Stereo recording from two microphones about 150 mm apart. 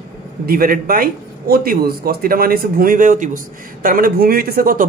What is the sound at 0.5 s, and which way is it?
Speech, 75° right (ahead or behind).